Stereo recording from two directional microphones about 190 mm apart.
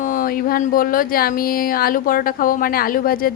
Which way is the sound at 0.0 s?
45° left (ahead or behind).